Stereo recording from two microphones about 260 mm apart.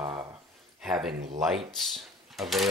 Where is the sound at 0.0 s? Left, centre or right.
Centre.